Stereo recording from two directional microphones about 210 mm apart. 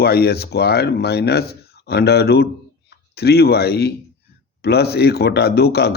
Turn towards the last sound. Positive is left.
turn(degrees=50)  # may be behind; listen again after turning